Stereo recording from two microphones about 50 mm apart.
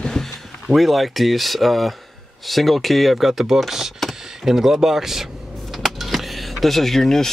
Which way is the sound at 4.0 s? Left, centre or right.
Centre.